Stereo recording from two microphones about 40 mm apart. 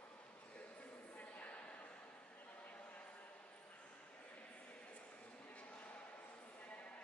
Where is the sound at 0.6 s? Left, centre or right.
Left.